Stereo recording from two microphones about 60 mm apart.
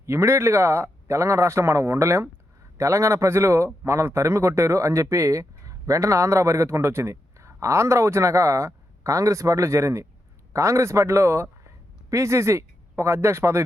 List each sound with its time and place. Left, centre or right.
0.0 s speech: right